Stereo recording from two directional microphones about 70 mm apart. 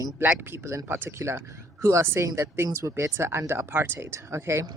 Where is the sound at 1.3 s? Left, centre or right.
Right.